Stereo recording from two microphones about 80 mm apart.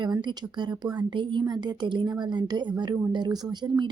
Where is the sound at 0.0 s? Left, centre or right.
Right.